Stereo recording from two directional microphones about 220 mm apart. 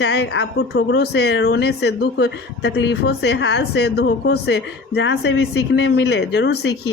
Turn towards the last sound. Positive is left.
turn(degrees=50)  # may be behind; listen again after turning